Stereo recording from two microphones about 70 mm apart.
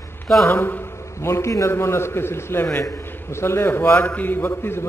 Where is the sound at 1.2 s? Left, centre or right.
Left.